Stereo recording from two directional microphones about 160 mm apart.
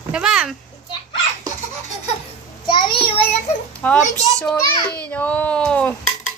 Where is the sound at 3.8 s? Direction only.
5° left (ahead or behind).